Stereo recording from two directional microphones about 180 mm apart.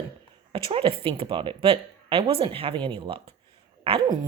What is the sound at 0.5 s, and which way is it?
A woman's voice, 30° right (ahead or behind).